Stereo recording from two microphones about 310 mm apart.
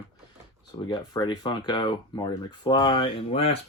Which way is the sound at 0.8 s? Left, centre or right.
Centre.